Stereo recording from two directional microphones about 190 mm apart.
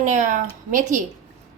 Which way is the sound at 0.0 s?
40° right (ahead or behind).